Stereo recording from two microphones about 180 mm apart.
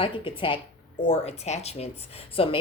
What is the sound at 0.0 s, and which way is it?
Speech, 30° left (ahead or behind).